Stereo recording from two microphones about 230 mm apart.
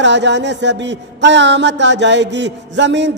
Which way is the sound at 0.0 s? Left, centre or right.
Right.